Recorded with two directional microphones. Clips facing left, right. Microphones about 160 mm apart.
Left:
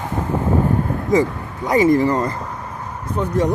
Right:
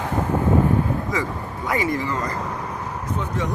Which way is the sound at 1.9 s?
40° left (ahead or behind).